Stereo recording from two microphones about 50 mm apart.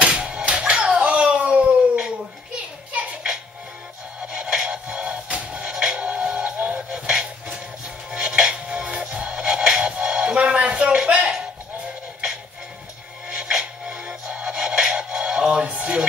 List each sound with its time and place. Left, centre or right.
0.0 s music: right
4.3 s music: centre